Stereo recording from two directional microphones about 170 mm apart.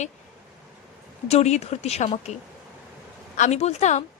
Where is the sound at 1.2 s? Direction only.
40° left (ahead or behind).